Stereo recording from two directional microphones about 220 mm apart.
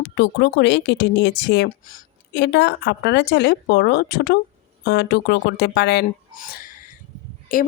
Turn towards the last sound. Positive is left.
turn(degrees=40)  # may be behind; listen again after turning